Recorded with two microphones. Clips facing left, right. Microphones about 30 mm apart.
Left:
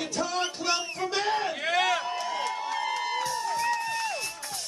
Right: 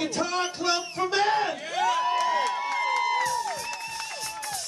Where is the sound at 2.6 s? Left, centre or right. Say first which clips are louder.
Right 4 dB; right.